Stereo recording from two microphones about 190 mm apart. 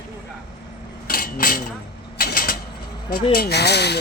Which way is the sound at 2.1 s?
50° left (ahead or behind).